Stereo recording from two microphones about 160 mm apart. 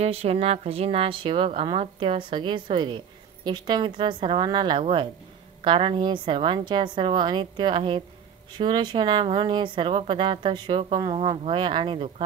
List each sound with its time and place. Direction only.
0.0 s a woman's voice: 40° right (ahead or behind)